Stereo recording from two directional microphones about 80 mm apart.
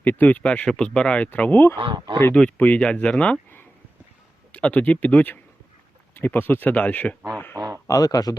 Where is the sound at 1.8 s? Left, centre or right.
Right.